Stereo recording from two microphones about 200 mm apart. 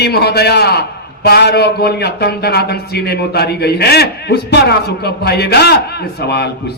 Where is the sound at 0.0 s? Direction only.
55° left (ahead or behind).